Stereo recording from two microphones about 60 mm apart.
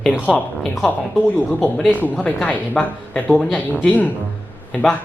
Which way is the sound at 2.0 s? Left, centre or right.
Left.